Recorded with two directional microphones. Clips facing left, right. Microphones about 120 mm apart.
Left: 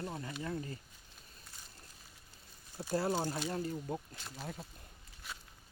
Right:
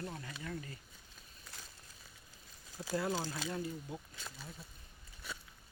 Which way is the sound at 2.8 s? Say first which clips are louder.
Left 2 dB; 30° left (ahead or behind).